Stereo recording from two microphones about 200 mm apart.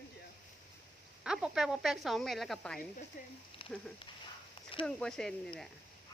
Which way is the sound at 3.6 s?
25° left (ahead or behind).